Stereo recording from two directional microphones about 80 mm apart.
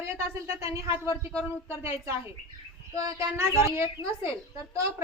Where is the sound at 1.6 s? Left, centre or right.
Right.